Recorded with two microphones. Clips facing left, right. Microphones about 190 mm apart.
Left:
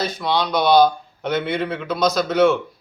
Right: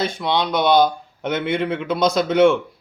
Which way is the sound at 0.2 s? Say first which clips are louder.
Left 1 dB; 25° right (ahead or behind).